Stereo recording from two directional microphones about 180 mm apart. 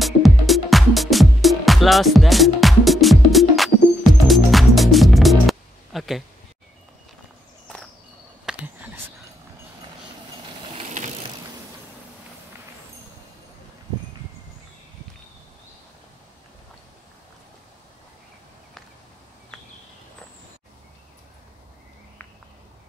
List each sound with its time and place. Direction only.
0.0 s music: centre (ahead or behind)
8.5 s a sound: 10° right (ahead or behind)
10.8 s vehicle: 40° right (ahead or behind)